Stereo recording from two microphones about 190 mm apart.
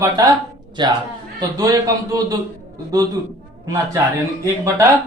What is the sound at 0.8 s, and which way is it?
A man's voice, 25° right (ahead or behind).